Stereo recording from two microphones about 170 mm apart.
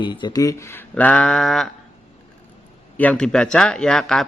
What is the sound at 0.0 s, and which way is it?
Speech, 25° left (ahead or behind).